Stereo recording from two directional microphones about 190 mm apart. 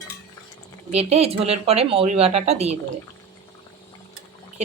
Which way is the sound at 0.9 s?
35° right (ahead or behind).